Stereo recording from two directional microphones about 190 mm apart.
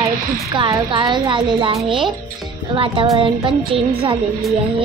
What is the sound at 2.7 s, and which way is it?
A child's voice, 25° right (ahead or behind).